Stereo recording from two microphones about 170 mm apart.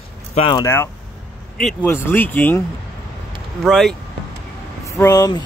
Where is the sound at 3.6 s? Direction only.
5° left (ahead or behind).